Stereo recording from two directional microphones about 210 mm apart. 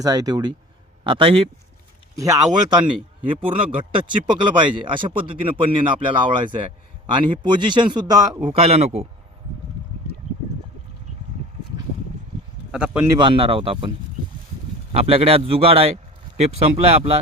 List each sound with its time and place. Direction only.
0.0 s speech: 20° right (ahead or behind)
2.1 s speech: 15° right (ahead or behind)
4.1 s speech: 20° right (ahead or behind)
8.4 s speech: 30° right (ahead or behind)
12.7 s a man's voice: 5° right (ahead or behind)
13.1 s speech: 25° right (ahead or behind)
14.9 s speech: 30° right (ahead or behind)